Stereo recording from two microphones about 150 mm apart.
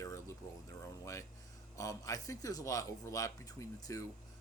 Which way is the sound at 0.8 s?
20° left (ahead or behind).